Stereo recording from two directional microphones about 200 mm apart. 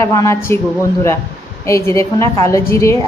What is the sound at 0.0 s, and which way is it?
Speech, 15° left (ahead or behind).